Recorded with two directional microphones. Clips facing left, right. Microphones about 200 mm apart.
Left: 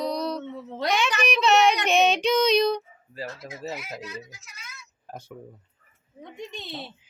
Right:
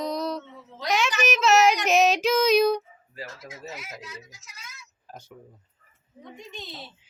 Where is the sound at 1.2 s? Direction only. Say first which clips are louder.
Right 1 dB; centre (ahead or behind).